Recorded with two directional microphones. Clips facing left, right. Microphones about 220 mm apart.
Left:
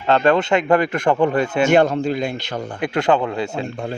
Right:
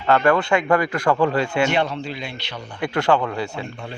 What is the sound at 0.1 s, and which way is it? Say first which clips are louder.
Speech: left 2 dB; 20° left (ahead or behind).